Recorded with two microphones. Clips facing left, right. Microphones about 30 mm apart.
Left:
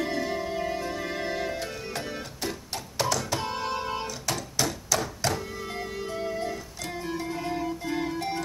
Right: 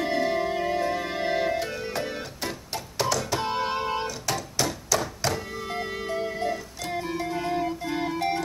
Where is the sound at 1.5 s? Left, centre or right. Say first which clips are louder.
Right 4 dB; centre.